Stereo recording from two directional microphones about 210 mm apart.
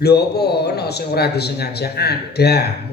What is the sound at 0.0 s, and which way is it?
A man's voice, 50° left (ahead or behind).